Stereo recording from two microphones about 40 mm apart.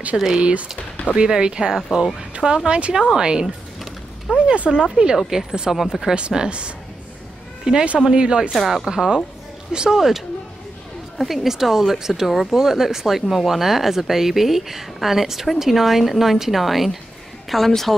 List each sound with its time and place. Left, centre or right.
0.4 s speech: right; by 6.1 s centre
6.1 s speech: right
8.5 s speech: centre
8.8 s speech: centre
9.9 s a woman's voice: centre